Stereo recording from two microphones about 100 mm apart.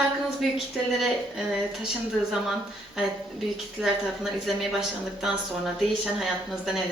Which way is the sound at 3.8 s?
Centre (ahead or behind).